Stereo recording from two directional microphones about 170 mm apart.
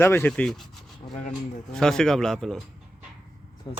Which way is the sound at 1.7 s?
5° left (ahead or behind).